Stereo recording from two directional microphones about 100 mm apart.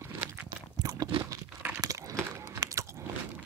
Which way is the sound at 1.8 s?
35° right (ahead or behind).